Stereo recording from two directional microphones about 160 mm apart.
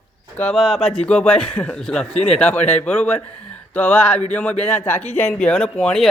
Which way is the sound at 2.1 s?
40° left (ahead or behind).